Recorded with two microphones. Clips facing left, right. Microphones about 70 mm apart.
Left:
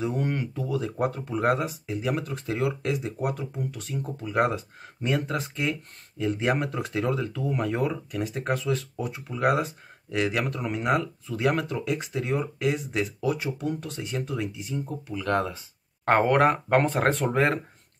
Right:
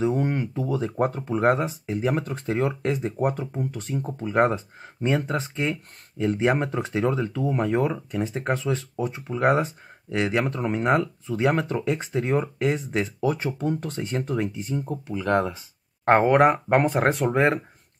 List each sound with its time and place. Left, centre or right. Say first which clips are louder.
0.0 s speech: right 4 dB; centre
11.7 s speech: right 4 dB; right
15.0 s speech: right 3 dB; centre